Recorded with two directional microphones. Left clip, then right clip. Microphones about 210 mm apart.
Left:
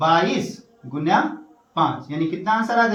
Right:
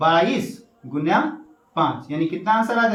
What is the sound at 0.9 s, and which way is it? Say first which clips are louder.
Speech: left 1 dB; 5° left (ahead or behind).